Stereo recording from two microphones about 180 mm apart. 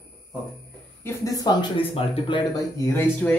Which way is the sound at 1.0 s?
20° left (ahead or behind).